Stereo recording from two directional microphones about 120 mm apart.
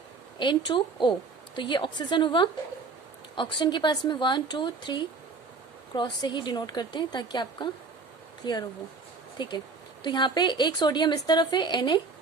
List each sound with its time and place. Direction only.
0.3 s a woman's voice: 40° left (ahead or behind)